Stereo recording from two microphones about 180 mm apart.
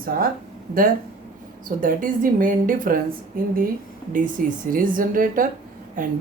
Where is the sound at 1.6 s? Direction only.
50° right (ahead or behind).